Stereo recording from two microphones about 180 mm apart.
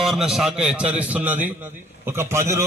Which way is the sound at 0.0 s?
Centre (ahead or behind).